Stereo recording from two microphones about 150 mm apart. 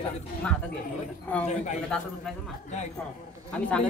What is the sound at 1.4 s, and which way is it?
Speech, 50° left (ahead or behind).